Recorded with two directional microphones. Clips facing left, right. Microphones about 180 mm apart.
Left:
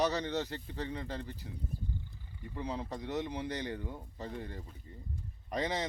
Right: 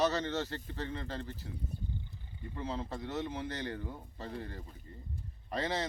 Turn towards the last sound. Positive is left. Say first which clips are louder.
# even
turn(degrees=15)  # may be behind; listen again after turning